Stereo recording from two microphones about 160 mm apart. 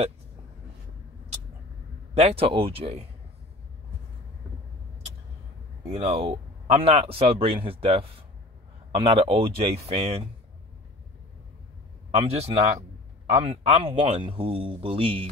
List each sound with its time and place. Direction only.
2.1 s speech: 35° right (ahead or behind)
5.9 s speech: 40° right (ahead or behind)
12.2 s speech: 40° right (ahead or behind)